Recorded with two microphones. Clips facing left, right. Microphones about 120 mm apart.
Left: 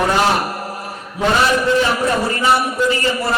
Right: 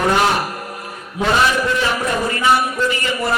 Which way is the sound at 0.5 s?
30° left (ahead or behind).